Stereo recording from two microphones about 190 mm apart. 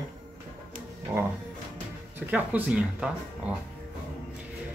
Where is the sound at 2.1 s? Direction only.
10° right (ahead or behind).